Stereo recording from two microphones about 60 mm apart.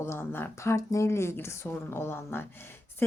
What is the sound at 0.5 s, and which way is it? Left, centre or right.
Speech, left.